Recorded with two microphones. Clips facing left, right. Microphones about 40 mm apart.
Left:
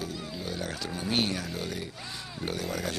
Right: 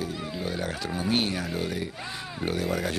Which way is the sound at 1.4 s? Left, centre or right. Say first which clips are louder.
Right 5 dB; centre.